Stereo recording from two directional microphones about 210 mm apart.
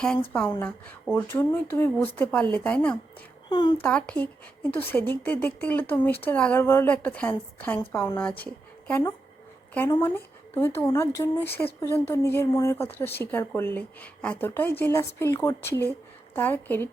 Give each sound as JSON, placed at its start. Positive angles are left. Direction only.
{"t": 1.1, "sound": "speech", "side_deg": 10}
{"t": 3.5, "sound": "speech", "side_deg": 20}
{"t": 3.8, "sound": "speech", "side_deg": 5}